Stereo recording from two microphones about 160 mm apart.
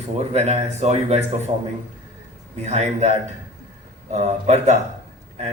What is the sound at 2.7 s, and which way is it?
A man's voice, 45° right (ahead or behind).